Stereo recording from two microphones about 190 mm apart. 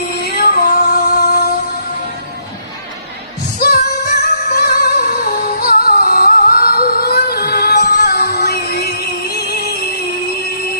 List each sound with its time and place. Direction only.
0.6 s music: 50° left (ahead or behind)
3.5 s music: 55° left (ahead or behind)